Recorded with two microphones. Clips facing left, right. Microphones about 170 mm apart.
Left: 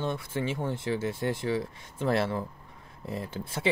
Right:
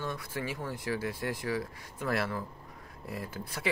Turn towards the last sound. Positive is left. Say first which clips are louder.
# left 4 dB
turn(degrees=25)  # may be behind; listen again after turning